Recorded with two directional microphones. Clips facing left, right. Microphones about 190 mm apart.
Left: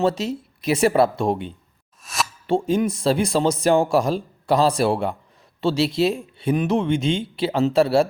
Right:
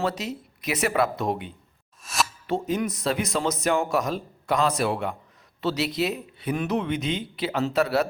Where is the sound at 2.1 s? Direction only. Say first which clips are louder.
Even; centre (ahead or behind).